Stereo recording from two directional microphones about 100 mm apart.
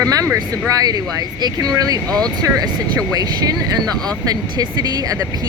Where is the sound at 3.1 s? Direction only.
40° right (ahead or behind).